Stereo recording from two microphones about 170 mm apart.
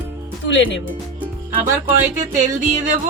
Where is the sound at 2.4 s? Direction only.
50° right (ahead or behind).